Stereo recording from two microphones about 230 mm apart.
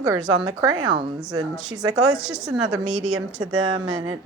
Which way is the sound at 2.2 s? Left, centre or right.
Centre.